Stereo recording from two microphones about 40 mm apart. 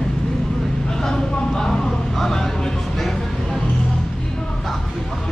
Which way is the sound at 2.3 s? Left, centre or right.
Centre.